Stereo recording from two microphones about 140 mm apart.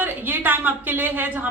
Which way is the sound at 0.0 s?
15° right (ahead or behind).